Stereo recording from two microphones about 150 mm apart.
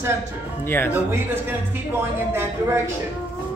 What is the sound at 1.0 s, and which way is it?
Speech, 15° right (ahead or behind).